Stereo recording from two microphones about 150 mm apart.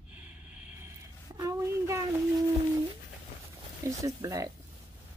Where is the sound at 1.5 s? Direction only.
20° right (ahead or behind).